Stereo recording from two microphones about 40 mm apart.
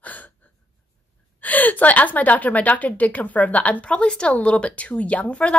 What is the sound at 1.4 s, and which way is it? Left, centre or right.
Speech, left.